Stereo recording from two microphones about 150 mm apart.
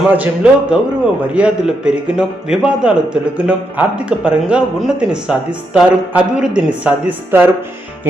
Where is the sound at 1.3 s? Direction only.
5° right (ahead or behind).